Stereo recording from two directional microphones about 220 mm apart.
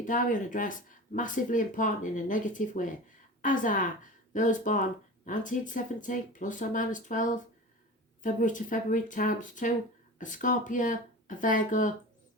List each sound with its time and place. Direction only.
0.0 s speech: 35° left (ahead or behind)